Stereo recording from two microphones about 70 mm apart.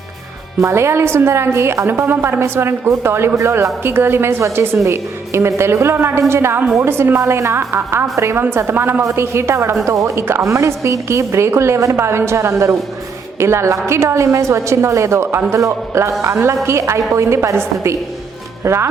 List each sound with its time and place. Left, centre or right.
0.6 s a woman's voice: right
9.8 s a woman's voice: right
15.5 s a woman's voice: right